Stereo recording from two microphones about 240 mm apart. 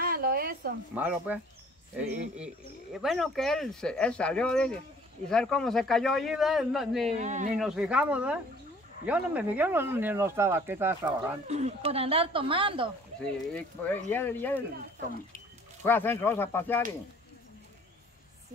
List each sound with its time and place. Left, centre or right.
0.0 s a sound: right
0.9 s speech: centre
7.2 s speech: right
7.5 s speech: centre
11.4 s speech: right
13.2 s speech: centre
15.8 s speech: centre